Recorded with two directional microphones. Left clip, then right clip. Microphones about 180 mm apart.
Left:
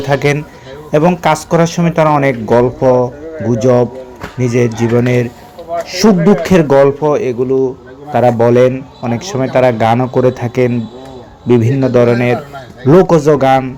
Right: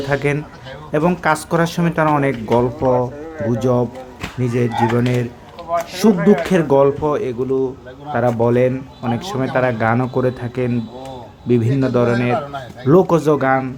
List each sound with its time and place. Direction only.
0.0 s a man's voice: 15° left (ahead or behind)